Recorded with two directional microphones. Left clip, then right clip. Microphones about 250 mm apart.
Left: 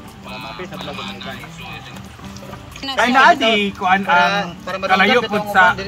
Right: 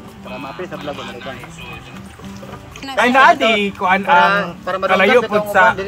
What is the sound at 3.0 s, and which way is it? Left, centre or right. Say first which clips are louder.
A man's voice: right 1 dB; right.